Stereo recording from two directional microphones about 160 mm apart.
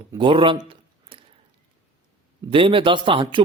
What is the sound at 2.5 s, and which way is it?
Speech, 35° right (ahead or behind).